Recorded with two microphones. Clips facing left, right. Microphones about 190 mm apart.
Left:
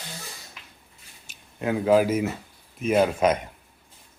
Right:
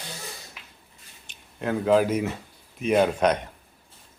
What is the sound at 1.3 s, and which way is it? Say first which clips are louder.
Speech: left 1 dB; 5° left (ahead or behind).